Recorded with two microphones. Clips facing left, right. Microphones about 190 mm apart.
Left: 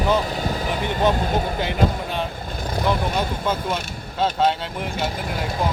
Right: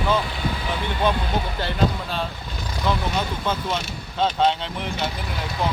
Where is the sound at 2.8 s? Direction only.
10° left (ahead or behind).